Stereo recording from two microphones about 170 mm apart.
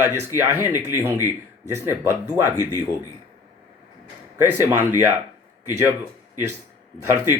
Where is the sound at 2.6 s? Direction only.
20° left (ahead or behind).